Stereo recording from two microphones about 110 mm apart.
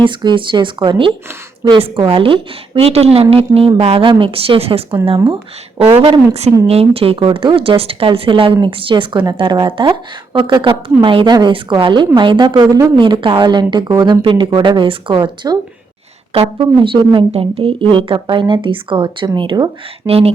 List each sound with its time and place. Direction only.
0.0 s speech: 45° right (ahead or behind)
14.2 s speech: 50° right (ahead or behind)
16.3 s speech: 55° right (ahead or behind)
17.3 s speech: 60° right (ahead or behind); by 19.7 s 45° right (ahead or behind)
20.1 s speech: 65° right (ahead or behind)